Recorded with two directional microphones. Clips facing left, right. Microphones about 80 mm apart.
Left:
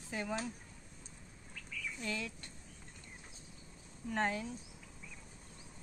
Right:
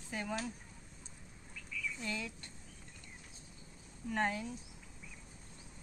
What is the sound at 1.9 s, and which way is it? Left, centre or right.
Speech, centre.